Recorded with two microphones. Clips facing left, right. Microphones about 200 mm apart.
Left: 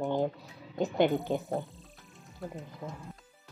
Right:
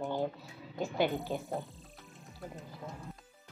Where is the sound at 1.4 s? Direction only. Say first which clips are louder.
Left 4 dB; centre (ahead or behind).